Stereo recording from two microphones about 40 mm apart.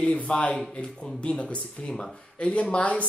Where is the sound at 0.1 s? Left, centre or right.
Left.